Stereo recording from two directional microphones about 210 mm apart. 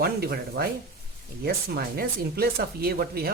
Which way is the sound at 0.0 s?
50° right (ahead or behind).